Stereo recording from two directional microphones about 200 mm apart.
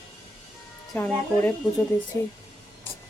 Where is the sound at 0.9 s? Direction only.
10° left (ahead or behind).